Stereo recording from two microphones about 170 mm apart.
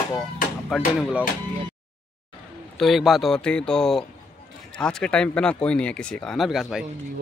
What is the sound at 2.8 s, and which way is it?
Speech, centre (ahead or behind).